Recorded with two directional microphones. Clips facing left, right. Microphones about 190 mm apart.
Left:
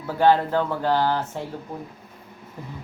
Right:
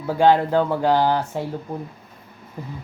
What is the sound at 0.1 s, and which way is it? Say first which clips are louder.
Speech: right 2 dB; 15° right (ahead or behind).